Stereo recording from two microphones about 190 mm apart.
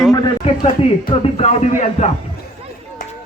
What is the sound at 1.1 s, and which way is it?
Speech, 35° left (ahead or behind).